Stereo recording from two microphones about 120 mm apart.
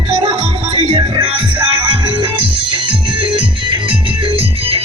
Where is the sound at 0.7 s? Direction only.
45° right (ahead or behind).